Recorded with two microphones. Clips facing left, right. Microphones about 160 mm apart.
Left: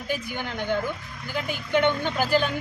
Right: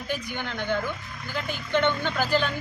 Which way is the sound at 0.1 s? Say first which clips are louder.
Left 2 dB; 10° left (ahead or behind).